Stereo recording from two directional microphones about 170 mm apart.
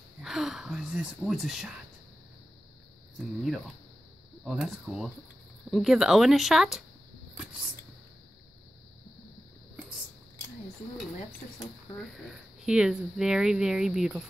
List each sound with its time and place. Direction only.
0.2 s speech: centre (ahead or behind)
3.2 s speech: centre (ahead or behind)
7.3 s a sound: 5° right (ahead or behind)
12.6 s speech: 5° right (ahead or behind)